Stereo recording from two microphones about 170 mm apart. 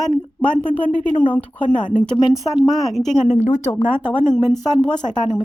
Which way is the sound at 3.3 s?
45° left (ahead or behind).